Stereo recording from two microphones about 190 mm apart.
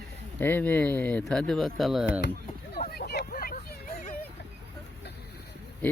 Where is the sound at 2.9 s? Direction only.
55° left (ahead or behind).